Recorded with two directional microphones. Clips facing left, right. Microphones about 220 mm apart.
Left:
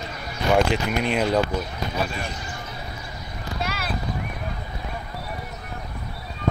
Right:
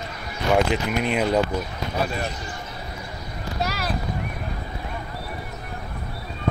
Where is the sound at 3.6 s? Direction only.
40° right (ahead or behind).